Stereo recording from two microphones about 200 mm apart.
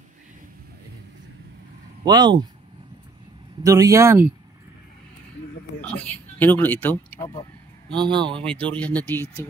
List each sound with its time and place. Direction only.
2.0 s speech: 20° right (ahead or behind)
3.6 s speech: 15° right (ahead or behind)
5.8 s speech: 10° left (ahead or behind)
7.9 s speech: 25° right (ahead or behind)
8.5 s speech: 5° left (ahead or behind)